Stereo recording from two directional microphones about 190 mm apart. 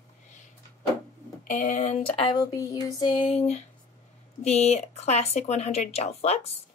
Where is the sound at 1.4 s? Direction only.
45° left (ahead or behind).